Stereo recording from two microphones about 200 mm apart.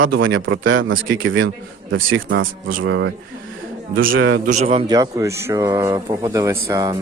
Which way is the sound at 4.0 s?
80° right.